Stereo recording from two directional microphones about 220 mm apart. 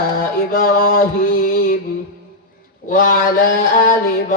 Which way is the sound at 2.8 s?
40° left (ahead or behind).